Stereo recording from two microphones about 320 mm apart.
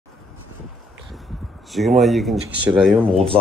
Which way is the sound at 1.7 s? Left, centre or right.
Centre.